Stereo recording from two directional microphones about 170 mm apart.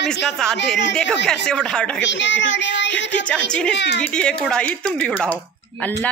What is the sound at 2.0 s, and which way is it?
Speech, 90° left.